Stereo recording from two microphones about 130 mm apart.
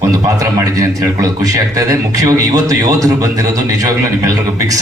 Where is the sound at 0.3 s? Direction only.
25° right (ahead or behind).